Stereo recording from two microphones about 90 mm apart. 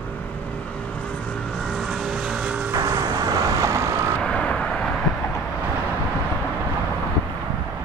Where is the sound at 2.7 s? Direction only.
35° right (ahead or behind).